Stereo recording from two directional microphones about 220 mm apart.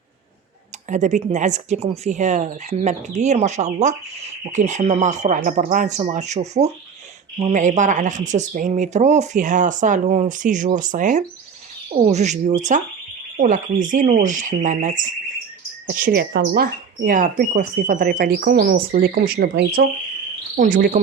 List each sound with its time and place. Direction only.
0.9 s speech: 35° right (ahead or behind)